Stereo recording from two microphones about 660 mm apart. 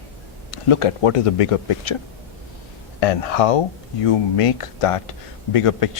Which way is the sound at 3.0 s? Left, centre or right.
Left.